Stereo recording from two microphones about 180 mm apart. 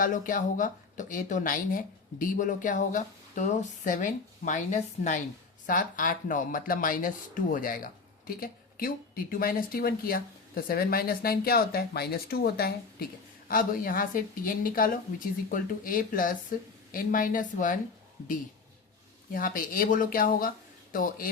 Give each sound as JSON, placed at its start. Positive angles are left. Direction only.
{"t": 0.0, "sound": "speech", "side_deg": 50}
{"t": 19.3, "sound": "speech", "side_deg": 50}